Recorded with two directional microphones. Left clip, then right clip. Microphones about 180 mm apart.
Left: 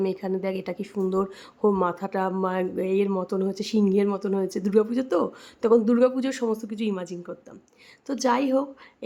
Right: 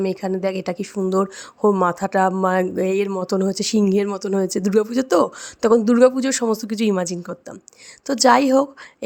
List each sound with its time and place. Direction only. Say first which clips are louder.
0.0 s a woman's voice: right 5 dB; 25° right (ahead or behind)